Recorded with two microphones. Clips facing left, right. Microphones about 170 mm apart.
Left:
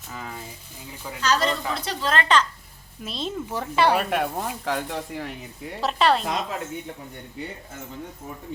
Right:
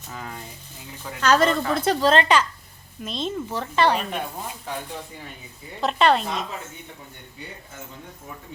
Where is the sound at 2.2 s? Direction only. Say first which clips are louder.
Right 1 dB; 10° right (ahead or behind).